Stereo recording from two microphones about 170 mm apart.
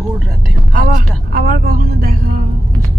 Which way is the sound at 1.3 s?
60° right (ahead or behind).